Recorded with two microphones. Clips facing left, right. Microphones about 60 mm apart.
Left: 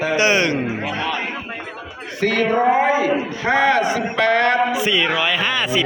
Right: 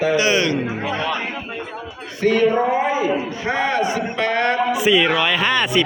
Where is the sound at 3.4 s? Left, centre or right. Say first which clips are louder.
Left 5 dB; left.